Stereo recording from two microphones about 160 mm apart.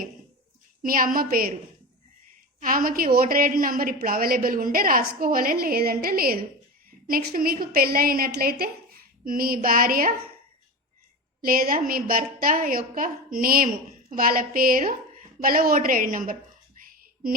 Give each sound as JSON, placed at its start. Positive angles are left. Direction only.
{"t": 0.8, "sound": "a woman's voice", "side_deg": -60}
{"t": 2.6, "sound": "a woman's voice", "side_deg": -60}
{"t": 11.4, "sound": "a woman's voice", "side_deg": -65}
{"t": 16.8, "sound": "a sound", "side_deg": -65}